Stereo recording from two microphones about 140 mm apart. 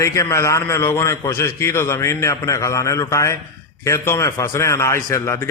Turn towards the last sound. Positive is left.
turn(degrees=20)  # may be behind; listen again after turning